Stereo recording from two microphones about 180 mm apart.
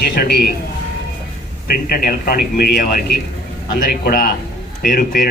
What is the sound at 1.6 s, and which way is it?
A man's voice, 55° left (ahead or behind).